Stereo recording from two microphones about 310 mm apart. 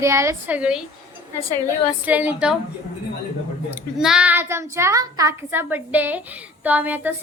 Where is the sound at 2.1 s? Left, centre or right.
Centre.